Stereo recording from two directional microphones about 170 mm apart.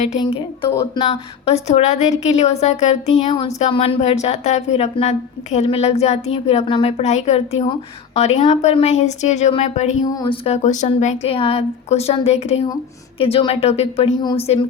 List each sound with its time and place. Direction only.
1.5 s a woman's voice: 40° left (ahead or behind)
3.2 s a woman's voice: 30° left (ahead or behind)
10.0 s a woman's voice: 25° left (ahead or behind)